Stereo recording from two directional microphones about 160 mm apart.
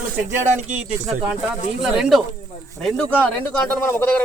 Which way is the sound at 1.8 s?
Centre (ahead or behind).